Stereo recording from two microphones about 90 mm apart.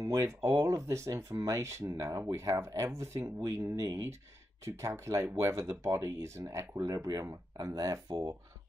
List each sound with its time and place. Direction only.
0.0 s speech: 35° right (ahead or behind)